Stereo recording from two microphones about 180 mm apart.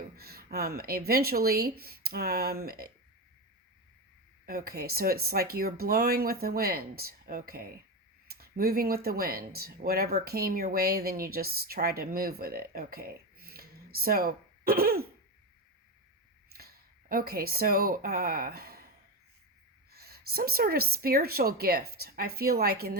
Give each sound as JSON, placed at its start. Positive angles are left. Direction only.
{"t": 0.2, "sound": "a sound", "side_deg": -60}
{"t": 0.8, "sound": "speech", "side_deg": -55}
{"t": 4.4, "sound": "speech", "side_deg": -55}
{"t": 12.9, "sound": "a sound", "side_deg": -55}
{"t": 16.6, "sound": "speech", "side_deg": -55}
{"t": 19.9, "sound": "speech", "side_deg": -60}